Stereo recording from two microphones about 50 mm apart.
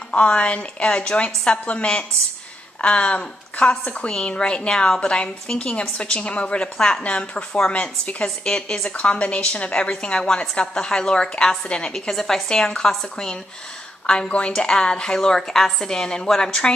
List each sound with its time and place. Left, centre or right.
0.1 s a woman's voice: left
4.1 s a woman's voice: centre
12.1 s a woman's voice: centre